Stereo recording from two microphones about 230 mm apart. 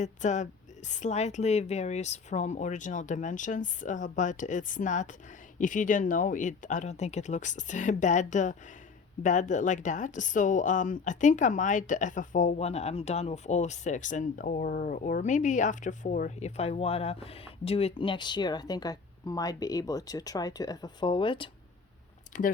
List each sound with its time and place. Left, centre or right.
0.0 s speech: left
22.3 s speech: left